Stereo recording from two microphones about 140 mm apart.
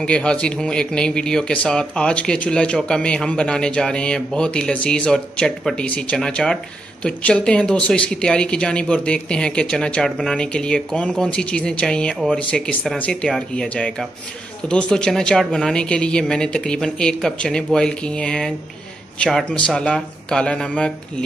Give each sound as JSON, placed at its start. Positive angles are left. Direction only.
{"t": 0.0, "sound": "speech", "side_deg": 5}